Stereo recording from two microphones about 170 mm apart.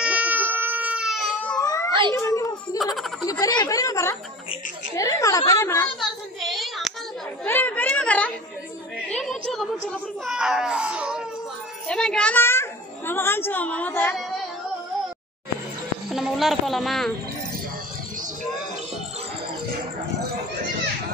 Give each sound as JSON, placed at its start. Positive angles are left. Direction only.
{"t": 0.0, "sound": "baby cry", "side_deg": -10}
{"t": 1.6, "sound": "cat", "side_deg": 20}
{"t": 2.1, "sound": "children playing", "side_deg": 20}
{"t": 2.8, "sound": "baby laughter", "side_deg": 0}
{"t": 3.3, "sound": "a woman's voice", "side_deg": 20}
{"t": 6.4, "sound": "a sound", "side_deg": 0}
{"t": 7.4, "sound": "a sound", "side_deg": 10}
{"t": 9.1, "sound": "a child's voice", "side_deg": 0}
{"t": 16.1, "sound": "speech", "side_deg": 0}